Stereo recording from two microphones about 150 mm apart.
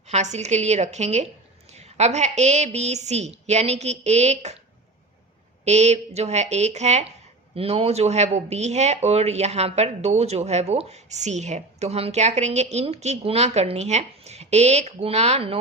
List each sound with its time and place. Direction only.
0.1 s speech: 50° right (ahead or behind)
5.6 s speech: 50° right (ahead or behind)